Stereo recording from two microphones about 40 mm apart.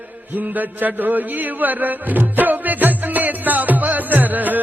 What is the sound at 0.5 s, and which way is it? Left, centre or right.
Speech, right.